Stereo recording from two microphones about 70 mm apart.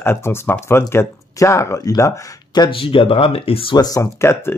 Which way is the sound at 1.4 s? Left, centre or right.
Left.